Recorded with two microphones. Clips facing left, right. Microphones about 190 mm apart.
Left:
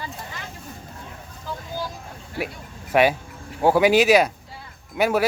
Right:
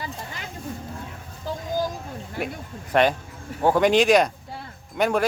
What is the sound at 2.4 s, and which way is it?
Speech, 50° right (ahead or behind).